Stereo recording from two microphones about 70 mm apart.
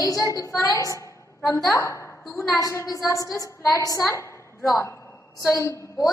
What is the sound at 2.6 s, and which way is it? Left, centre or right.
A woman's voice, left.